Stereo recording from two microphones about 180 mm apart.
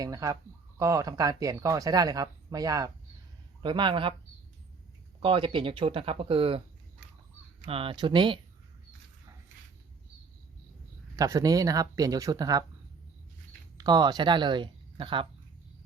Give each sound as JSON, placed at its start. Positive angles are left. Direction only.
{"t": 0.0, "sound": "speech", "side_deg": -20}
{"t": 5.2, "sound": "speech", "side_deg": -30}
{"t": 7.6, "sound": "speech", "side_deg": -30}
{"t": 11.2, "sound": "speech", "side_deg": -20}
{"t": 13.7, "sound": "speech", "side_deg": -20}